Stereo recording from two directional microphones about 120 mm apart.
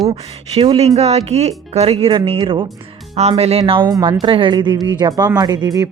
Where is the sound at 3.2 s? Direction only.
60° right (ahead or behind).